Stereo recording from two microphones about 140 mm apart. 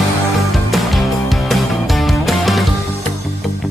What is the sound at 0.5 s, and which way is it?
Music, centre (ahead or behind).